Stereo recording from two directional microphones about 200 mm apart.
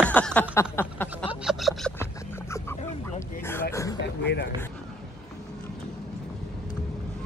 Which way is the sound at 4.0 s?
60° left (ahead or behind).